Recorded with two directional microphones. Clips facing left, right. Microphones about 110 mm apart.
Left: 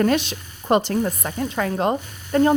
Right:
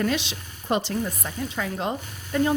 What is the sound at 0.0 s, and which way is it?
Speech, 45° left (ahead or behind).